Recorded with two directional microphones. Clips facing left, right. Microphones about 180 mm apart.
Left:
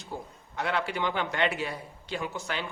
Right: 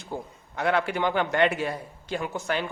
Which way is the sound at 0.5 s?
55° right (ahead or behind).